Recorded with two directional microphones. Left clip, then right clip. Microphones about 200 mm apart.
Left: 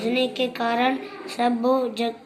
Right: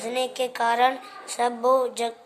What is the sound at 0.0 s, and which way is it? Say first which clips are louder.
Speech: left 3 dB; 45° right (ahead or behind).